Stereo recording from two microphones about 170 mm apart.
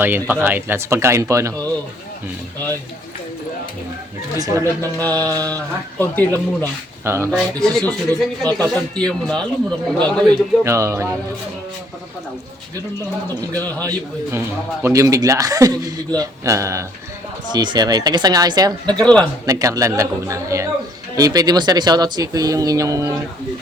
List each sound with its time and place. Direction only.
0.0 s speech: 10° right (ahead or behind)
4.6 s speech: 10° left (ahead or behind)
7.0 s speech: 15° right (ahead or behind)
7.6 s speech: 5° left (ahead or behind)
10.6 s speech: 15° right (ahead or behind)
13.5 s speech: 10° left (ahead or behind)
14.3 s a man's voice: 15° right (ahead or behind)
18.9 s speech: 5° left (ahead or behind)
19.5 s a man's voice: 20° right (ahead or behind)